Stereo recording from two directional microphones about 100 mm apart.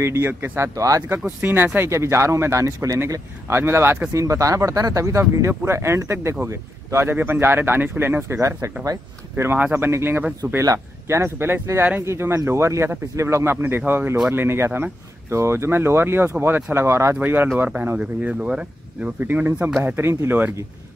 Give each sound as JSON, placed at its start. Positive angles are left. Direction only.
{"t": 0.0, "sound": "speech", "side_deg": -25}
{"t": 1.0, "sound": "speech", "side_deg": -20}